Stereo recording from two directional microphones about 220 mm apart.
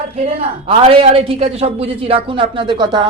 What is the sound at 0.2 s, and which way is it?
A man's voice, 25° right (ahead or behind).